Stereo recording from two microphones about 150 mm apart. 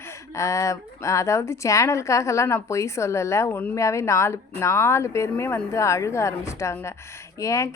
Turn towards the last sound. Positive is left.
turn(degrees=20)  # may be behind; listen again after turning